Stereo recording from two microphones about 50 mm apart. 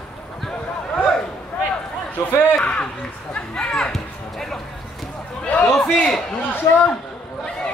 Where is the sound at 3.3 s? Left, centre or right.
Centre.